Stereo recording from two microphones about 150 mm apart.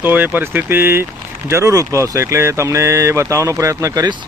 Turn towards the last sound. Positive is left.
turn(degrees=-25)  # may be behind; listen again after turning